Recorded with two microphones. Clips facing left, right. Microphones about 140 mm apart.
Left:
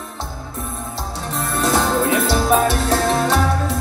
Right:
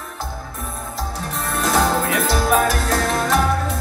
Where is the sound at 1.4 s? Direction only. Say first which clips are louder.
Left 1 dB; 35° left (ahead or behind).